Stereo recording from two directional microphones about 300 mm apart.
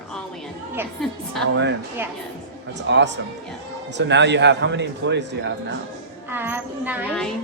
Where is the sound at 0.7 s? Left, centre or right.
Centre.